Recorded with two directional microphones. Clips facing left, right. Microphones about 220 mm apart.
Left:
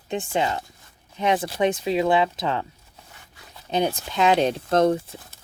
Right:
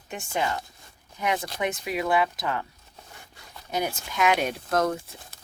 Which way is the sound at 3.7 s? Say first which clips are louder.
Left 6 dB; 30° left (ahead or behind).